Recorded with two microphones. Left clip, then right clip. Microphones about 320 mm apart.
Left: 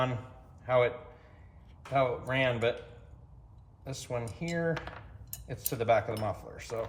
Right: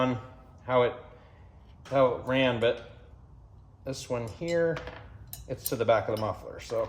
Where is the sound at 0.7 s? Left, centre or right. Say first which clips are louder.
Right 2 dB; centre.